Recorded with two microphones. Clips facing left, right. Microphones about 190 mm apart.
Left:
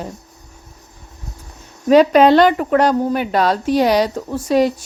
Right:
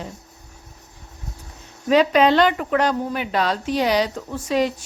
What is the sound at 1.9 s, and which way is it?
A woman's voice, 45° left (ahead or behind).